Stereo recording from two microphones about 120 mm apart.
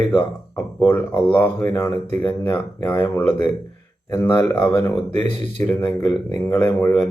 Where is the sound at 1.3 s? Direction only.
15° left (ahead or behind).